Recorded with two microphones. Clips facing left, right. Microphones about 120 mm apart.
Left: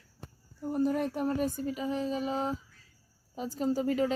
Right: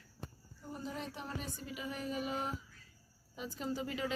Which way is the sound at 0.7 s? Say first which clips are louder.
Left 14 dB; 55° left (ahead or behind).